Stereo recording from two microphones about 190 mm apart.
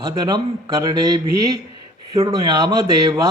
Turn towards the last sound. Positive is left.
turn(degrees=-20)  # may be behind; listen again after turning